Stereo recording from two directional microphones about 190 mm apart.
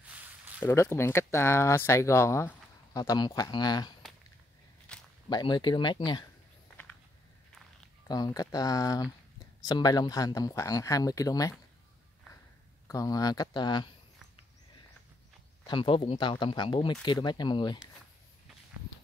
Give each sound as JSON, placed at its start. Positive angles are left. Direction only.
{"t": 0.0, "sound": "a sound", "side_deg": -10}
{"t": 0.6, "sound": "speech", "side_deg": 10}
{"t": 4.9, "sound": "a sound", "side_deg": 5}
{"t": 5.3, "sound": "speech", "side_deg": 25}
{"t": 8.1, "sound": "speech", "side_deg": 20}
{"t": 12.8, "sound": "speech", "side_deg": 20}
{"t": 15.6, "sound": "speech", "side_deg": 25}